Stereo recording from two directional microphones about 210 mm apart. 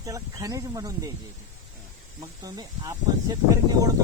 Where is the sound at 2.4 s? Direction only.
20° right (ahead or behind).